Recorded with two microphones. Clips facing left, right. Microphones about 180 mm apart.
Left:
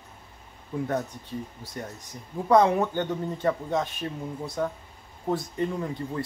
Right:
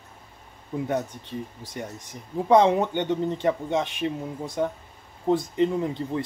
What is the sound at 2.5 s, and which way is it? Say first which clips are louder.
Speech: right 2 dB; 20° right (ahead or behind).